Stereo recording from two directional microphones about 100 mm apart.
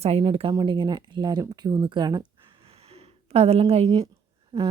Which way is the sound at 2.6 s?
80° right.